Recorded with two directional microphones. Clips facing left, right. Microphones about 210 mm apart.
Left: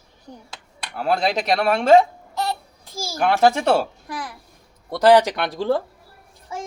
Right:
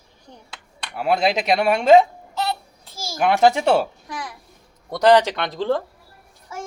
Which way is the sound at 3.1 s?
15° right (ahead or behind).